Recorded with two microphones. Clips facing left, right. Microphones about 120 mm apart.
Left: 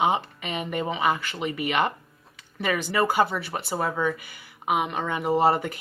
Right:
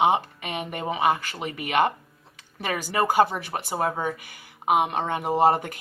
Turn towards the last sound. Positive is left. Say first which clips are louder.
# right 1 dB
turn(degrees=-45)  # may be behind; listen again after turning